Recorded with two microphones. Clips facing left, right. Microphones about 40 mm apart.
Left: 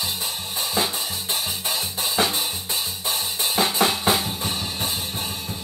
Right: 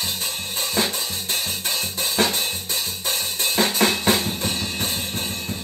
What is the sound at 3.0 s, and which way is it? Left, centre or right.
Drum kit, right.